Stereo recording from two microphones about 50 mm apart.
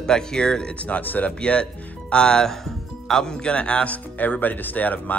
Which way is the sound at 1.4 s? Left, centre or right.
Left.